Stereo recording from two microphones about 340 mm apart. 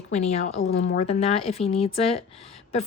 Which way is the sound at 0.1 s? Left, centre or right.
Centre.